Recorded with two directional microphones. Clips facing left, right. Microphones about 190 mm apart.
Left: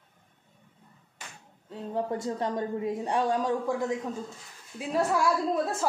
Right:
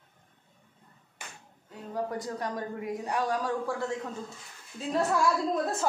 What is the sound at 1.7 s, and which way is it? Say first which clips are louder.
A woman's voice: left 3 dB; 25° left (ahead or behind).